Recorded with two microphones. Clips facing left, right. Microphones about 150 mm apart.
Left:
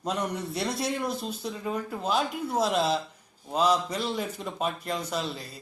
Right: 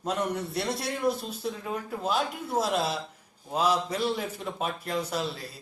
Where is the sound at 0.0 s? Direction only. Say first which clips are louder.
Right 1 dB; centre (ahead or behind).